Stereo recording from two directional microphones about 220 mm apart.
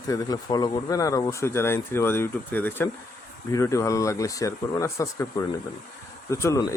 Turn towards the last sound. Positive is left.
turn(degrees=15)  # may be behind; listen again after turning